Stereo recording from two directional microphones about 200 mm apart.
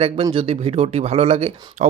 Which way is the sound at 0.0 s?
25° right (ahead or behind).